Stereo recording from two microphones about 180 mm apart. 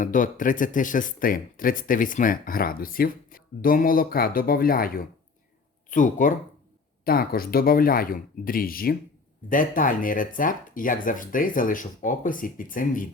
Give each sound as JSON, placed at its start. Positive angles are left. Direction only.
{"t": 0.0, "sound": "speech", "side_deg": 45}